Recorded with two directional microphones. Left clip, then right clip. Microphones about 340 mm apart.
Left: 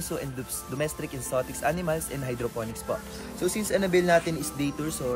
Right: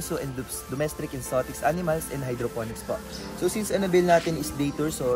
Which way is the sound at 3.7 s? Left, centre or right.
Centre.